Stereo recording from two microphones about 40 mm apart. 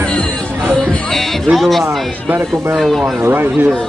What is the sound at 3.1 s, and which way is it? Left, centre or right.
Speech, right.